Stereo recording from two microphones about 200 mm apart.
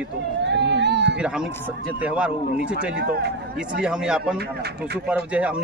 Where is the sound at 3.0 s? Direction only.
50° right (ahead or behind).